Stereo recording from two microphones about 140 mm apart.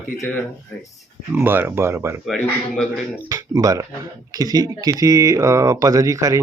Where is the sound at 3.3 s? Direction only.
25° right (ahead or behind).